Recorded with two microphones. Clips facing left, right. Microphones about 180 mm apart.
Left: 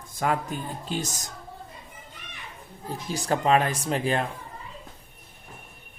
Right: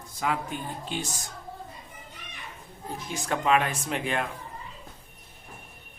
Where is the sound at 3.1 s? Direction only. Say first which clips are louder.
Left 3 dB; 35° left (ahead or behind).